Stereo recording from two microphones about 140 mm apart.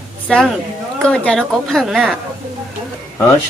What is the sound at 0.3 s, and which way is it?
Speech, 5° left (ahead or behind).